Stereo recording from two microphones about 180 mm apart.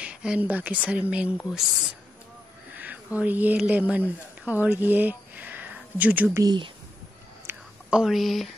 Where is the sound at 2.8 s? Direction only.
10° right (ahead or behind).